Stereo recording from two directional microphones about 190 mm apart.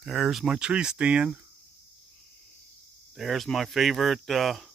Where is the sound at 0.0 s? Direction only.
Centre (ahead or behind).